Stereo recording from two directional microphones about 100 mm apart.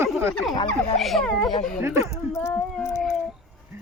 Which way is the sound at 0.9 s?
Centre (ahead or behind).